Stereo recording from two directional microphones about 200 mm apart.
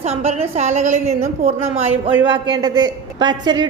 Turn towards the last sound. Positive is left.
turn(degrees=-20)  # may be behind; listen again after turning